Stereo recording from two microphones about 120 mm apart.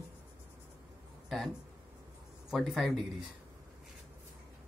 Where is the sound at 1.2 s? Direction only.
Centre (ahead or behind).